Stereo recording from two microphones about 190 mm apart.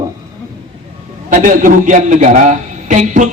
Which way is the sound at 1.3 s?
45° right (ahead or behind).